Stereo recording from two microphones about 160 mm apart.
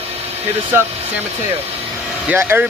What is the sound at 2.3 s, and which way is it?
Speech, 15° right (ahead or behind).